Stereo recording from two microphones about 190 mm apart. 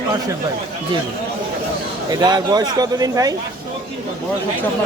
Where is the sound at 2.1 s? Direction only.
20° right (ahead or behind).